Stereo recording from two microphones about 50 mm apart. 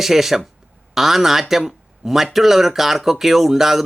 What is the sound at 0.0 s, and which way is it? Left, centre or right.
A man's voice, centre.